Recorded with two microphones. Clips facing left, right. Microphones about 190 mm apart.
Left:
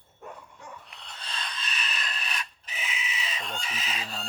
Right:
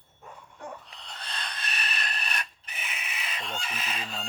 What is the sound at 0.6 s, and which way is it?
Filing, 60° right (ahead or behind).